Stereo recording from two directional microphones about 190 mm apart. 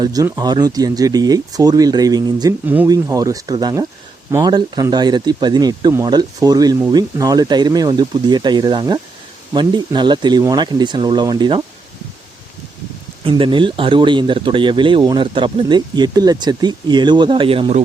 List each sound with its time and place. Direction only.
0.0 s speech: 20° right (ahead or behind)
13.2 s speech: 25° right (ahead or behind)